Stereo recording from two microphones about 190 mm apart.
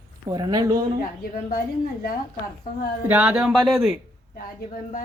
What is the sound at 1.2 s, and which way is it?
Speech, 50° left (ahead or behind).